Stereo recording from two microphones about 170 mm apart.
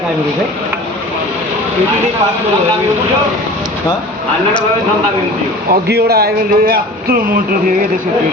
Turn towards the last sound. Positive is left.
turn(degrees=-70)  # may be behind; listen again after turning